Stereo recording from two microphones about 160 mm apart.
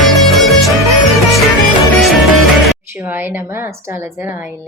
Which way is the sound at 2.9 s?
10° right (ahead or behind).